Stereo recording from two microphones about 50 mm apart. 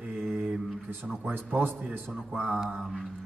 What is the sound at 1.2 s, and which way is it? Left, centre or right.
Speech, right.